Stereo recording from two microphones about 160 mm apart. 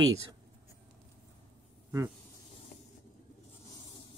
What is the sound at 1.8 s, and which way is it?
Snake, 15° right (ahead or behind).